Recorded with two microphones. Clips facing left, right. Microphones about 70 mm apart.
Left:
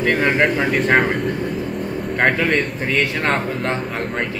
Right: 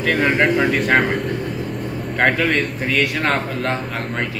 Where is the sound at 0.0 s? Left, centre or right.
Centre.